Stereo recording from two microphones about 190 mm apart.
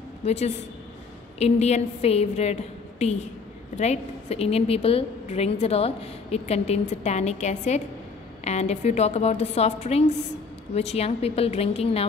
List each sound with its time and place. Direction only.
0.2 s a woman's voice: 35° left (ahead or behind)